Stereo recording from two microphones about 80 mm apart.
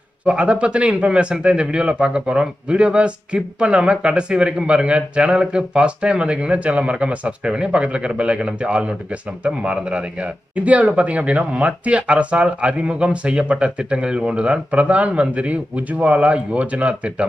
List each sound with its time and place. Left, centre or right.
0.3 s speech: centre